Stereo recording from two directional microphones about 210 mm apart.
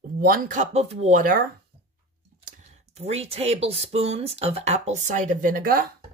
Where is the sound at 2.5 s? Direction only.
30° right (ahead or behind).